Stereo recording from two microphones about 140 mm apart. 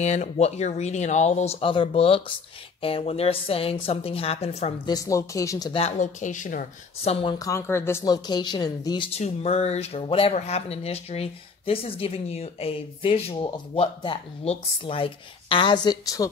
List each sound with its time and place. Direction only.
0.0 s a woman's voice: 55° left (ahead or behind)
4.8 s speech: 25° left (ahead or behind)
5.7 s a woman's voice: 45° left (ahead or behind)
5.9 s speech: 65° left (ahead or behind)
7.1 s a woman's voice: 45° left (ahead or behind)
7.3 s speech: 20° left (ahead or behind)
8.0 s speech: 30° left (ahead or behind)
9.2 s a woman's voice: 50° left (ahead or behind); by 16.3 s 25° left (ahead or behind)